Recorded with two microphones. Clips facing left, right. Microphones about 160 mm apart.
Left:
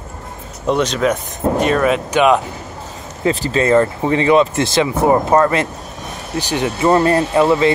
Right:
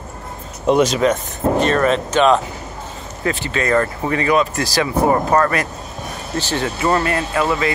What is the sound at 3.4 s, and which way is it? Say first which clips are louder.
Speech: left 5 dB; 30° left (ahead or behind).